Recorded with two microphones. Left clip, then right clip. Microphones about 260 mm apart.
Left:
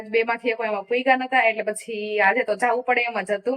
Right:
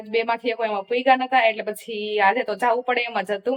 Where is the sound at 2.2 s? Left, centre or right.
Centre.